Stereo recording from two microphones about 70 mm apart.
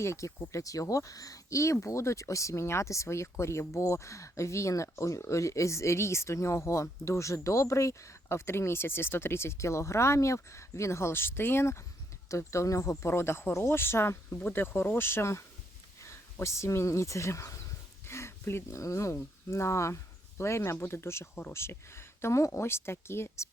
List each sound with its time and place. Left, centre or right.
0.0 s speech: left
18.0 s a sound: left
18.8 s speech: left